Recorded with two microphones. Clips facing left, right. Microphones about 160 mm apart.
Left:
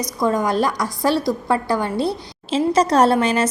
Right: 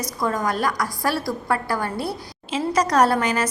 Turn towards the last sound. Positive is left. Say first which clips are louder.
# left 3 dB
turn(degrees=25)  # may be behind; listen again after turning